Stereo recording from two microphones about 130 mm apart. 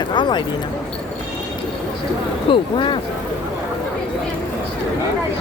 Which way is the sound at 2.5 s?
40° left (ahead or behind).